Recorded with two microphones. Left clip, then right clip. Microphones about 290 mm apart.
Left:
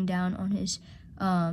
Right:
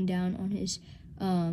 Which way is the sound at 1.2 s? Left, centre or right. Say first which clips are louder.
Left 4 dB; centre.